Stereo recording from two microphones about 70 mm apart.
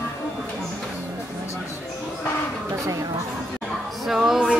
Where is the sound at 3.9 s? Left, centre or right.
Centre.